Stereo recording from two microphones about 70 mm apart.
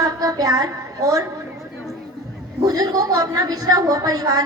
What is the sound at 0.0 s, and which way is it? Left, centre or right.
A woman's voice, right.